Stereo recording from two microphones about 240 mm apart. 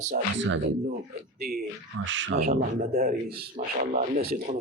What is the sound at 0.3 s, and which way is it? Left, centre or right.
Speech, right.